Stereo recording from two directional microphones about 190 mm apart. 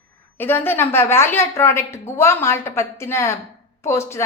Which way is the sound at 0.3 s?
10° left (ahead or behind).